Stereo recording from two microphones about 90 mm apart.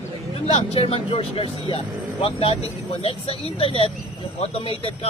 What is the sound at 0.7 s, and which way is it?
Speech, 85° left.